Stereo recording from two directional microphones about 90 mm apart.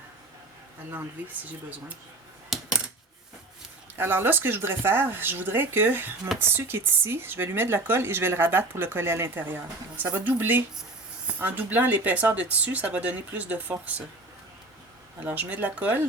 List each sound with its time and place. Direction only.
2.5 s coin: centre (ahead or behind)
3.9 s speech: 25° right (ahead or behind)
15.2 s speech: 15° right (ahead or behind)